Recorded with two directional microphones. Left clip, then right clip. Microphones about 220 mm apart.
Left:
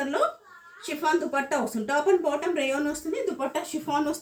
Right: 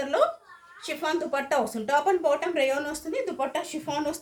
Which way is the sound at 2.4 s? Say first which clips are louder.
Right 1 dB; 40° right (ahead or behind).